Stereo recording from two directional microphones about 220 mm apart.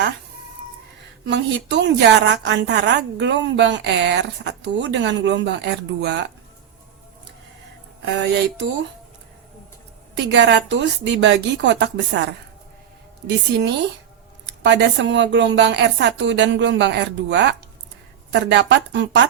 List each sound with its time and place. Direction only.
1.3 s a woman's voice: 55° right (ahead or behind)
8.0 s a woman's voice: 50° right (ahead or behind)
10.2 s a woman's voice: 55° right (ahead or behind)